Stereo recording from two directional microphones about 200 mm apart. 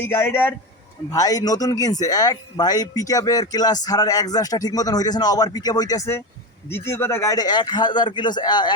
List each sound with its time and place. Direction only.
0.0 s a man's voice: 10° left (ahead or behind)